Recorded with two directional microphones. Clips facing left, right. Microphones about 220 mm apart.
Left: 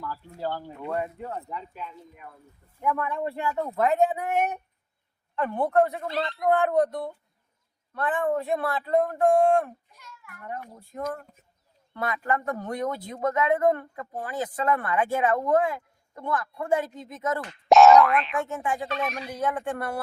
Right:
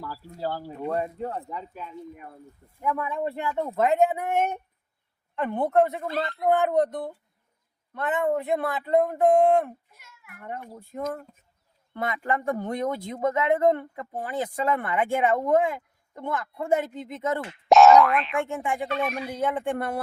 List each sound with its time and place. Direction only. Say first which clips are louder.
0.0 s speech: even; 35° right (ahead or behind)
2.9 s speech: right 1 dB; 10° right (ahead or behind)
12.2 s speech: right 3 dB; 25° right (ahead or behind)
17.7 s speech: even; centre (ahead or behind)
18.4 s speech: right 1 dB; 25° right (ahead or behind)